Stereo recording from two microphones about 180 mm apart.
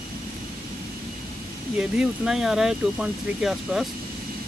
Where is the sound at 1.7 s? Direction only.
5° right (ahead or behind).